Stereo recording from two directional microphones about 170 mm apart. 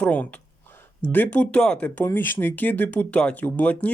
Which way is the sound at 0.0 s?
10° left (ahead or behind).